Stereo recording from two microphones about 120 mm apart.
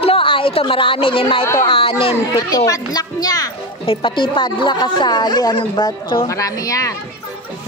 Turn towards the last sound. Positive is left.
turn(degrees=30)  # may be behind; listen again after turning